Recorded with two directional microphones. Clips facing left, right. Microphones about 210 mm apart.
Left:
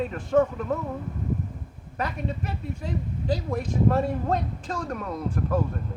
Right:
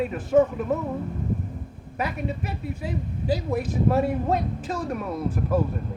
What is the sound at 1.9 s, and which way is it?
Speech, 10° right (ahead or behind).